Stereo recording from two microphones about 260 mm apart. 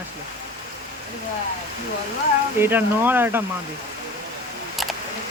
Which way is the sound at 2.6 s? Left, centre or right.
Centre.